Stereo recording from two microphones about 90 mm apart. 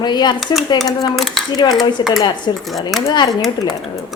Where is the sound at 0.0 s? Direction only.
55° left (ahead or behind).